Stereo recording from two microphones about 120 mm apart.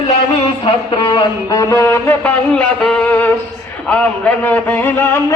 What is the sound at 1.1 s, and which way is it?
A man's voice, 30° left (ahead or behind).